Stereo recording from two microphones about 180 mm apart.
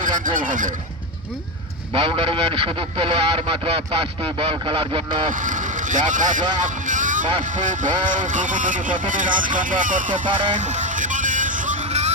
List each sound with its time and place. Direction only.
0.3 s speech: 45° right (ahead or behind)
1.9 s a man's voice: 30° right (ahead or behind)
5.4 s speech: 45° right (ahead or behind)
6.6 s vehicle: 45° right (ahead or behind)
7.6 s speech: 45° right (ahead or behind)
10.2 s speech: 25° right (ahead or behind)
10.5 s vehicle: 45° right (ahead or behind)